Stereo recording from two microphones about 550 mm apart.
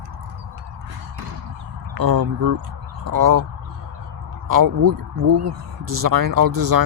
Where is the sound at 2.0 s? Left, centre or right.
Right.